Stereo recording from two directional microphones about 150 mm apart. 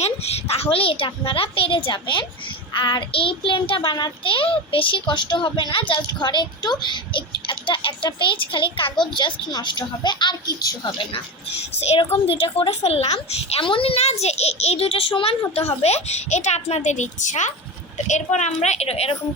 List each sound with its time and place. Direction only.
0.0 s a child's voice: 45° left (ahead or behind)